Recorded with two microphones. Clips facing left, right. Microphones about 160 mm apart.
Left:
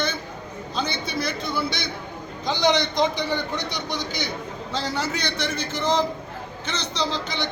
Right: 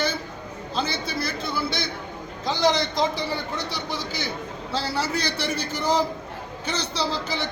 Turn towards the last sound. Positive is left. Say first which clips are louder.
# even
turn(degrees=-5)  # may be behind; listen again after turning